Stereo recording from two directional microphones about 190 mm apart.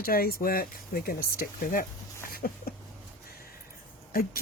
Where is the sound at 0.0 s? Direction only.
50° left (ahead or behind).